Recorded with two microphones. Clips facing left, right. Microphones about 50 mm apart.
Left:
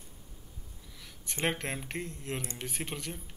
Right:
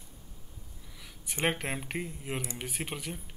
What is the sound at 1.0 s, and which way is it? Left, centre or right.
Speech, centre.